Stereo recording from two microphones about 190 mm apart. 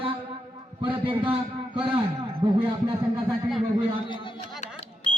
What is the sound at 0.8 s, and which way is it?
Speech, 25° right (ahead or behind).